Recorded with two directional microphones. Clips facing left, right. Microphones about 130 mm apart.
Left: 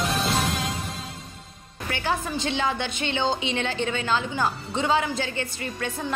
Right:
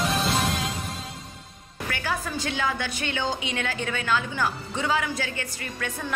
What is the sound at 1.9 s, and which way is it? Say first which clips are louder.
A woman's voice: left 3 dB; 25° left (ahead or behind).